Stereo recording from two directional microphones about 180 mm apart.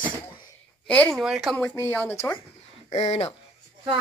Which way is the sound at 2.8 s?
35° left (ahead or behind).